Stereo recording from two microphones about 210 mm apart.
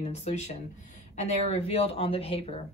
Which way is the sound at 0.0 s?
30° left (ahead or behind).